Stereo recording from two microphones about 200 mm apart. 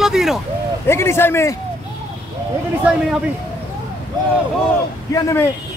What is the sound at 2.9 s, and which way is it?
Speech, 5° right (ahead or behind).